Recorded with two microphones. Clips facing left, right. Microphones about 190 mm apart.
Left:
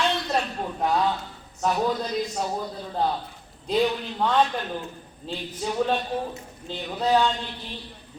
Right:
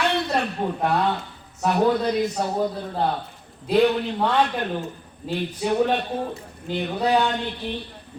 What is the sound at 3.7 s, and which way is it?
A woman's voice, 60° right (ahead or behind).